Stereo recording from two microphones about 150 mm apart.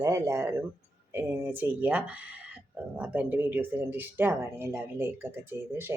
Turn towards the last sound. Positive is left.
turn(degrees=-15)  # may be behind; listen again after turning